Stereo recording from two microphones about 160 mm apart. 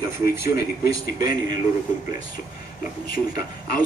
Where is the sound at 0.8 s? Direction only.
25° right (ahead or behind).